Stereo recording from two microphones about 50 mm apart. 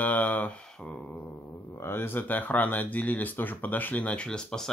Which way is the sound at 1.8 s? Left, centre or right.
Left.